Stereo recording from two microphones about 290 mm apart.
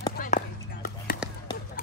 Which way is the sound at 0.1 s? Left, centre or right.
Left.